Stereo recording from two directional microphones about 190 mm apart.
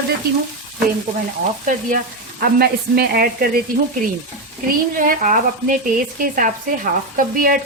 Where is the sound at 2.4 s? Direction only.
55° right (ahead or behind).